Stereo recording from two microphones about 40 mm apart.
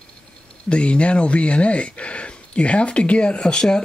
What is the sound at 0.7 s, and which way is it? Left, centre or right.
Speech, left.